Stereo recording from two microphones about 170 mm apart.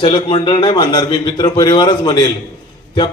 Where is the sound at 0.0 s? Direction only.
30° left (ahead or behind).